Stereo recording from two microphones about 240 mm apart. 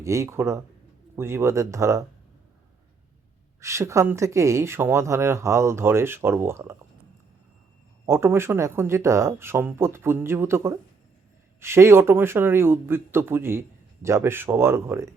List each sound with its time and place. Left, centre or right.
0.0 s speech: centre
3.6 s speech: centre
8.0 s speech: centre